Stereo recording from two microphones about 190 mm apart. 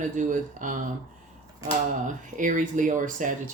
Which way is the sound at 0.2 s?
45° right (ahead or behind).